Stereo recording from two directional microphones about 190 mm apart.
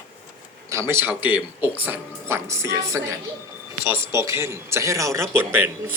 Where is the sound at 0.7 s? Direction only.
15° right (ahead or behind).